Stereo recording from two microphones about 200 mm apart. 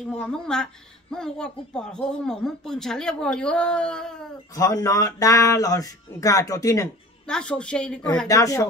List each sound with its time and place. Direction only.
0.0 s speech: 5° left (ahead or behind)
4.6 s speech: 15° left (ahead or behind)
7.2 s speech: 5° left (ahead or behind)
8.3 s speech: 15° left (ahead or behind)